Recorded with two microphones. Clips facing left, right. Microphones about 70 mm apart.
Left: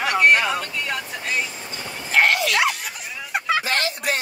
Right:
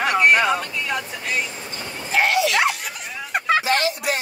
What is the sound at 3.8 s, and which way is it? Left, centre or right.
Music, left.